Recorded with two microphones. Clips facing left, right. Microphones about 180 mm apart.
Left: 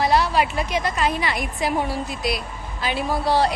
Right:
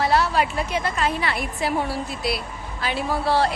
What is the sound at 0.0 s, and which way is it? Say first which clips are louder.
Speech: left 1 dB; 15° left (ahead or behind).